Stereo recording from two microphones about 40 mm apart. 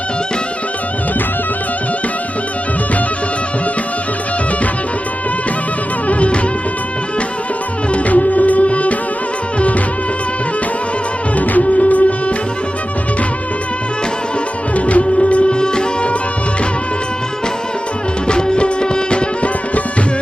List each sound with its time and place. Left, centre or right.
6.1 s music of bollywood: left
7.9 s music: left
11.3 s music: left
14.8 s music: left
18.3 s music: left